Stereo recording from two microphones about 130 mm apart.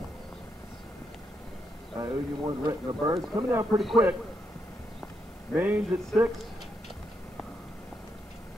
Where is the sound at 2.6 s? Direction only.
35° right (ahead or behind).